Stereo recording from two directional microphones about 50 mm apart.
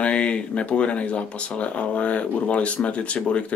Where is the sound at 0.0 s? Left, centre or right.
Left.